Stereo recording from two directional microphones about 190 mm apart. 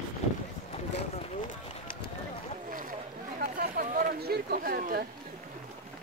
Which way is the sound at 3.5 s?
45° right (ahead or behind).